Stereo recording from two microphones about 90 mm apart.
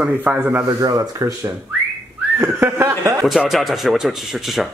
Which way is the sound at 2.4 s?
30° right (ahead or behind).